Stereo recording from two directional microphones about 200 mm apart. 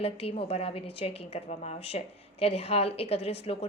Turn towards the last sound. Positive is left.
turn(degrees=30)  # may be behind; listen again after turning